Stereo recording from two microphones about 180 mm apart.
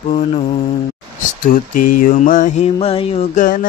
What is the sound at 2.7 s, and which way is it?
Mantra, 35° left (ahead or behind).